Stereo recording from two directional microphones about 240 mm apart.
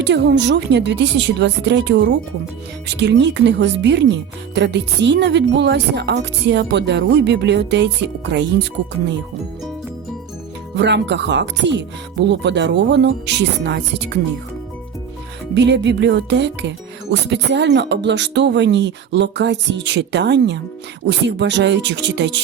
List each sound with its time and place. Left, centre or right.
0.0 s speech: right
10.8 s speech: right
15.5 s speech: right